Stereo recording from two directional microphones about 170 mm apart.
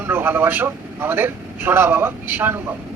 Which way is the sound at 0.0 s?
10° right (ahead or behind).